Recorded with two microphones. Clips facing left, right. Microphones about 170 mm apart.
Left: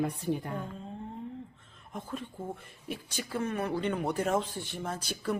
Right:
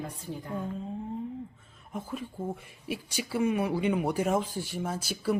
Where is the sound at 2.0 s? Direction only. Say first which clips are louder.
Right 3 dB; 5° right (ahead or behind).